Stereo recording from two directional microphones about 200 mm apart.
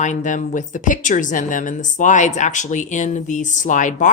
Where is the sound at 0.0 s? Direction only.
35° left (ahead or behind).